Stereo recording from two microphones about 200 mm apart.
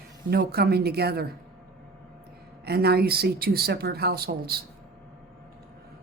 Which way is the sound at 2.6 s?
55° right (ahead or behind).